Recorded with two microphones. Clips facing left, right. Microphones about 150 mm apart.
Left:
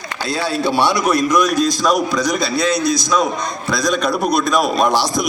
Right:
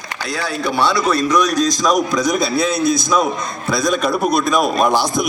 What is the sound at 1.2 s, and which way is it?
Speech, 10° left (ahead or behind).